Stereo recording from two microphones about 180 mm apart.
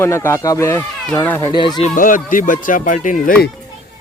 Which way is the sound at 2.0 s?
50° left (ahead or behind).